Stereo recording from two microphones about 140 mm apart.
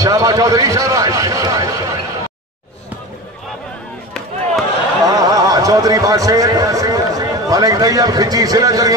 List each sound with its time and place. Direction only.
0.0 s a man's voice: 25° right (ahead or behind)
5.0 s a man's voice: 25° right (ahead or behind)